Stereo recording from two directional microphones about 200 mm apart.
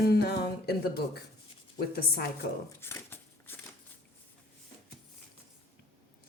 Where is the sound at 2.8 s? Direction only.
10° left (ahead or behind).